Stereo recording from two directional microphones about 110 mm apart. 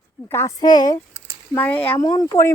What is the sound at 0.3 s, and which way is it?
Speech, 20° left (ahead or behind).